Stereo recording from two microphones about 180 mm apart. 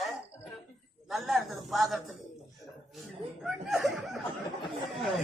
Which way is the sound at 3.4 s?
Centre (ahead or behind).